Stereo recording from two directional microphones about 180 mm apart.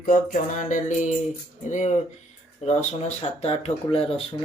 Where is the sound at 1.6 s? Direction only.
40° left (ahead or behind).